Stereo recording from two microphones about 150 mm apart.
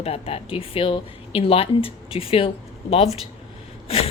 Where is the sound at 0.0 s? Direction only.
40° left (ahead or behind).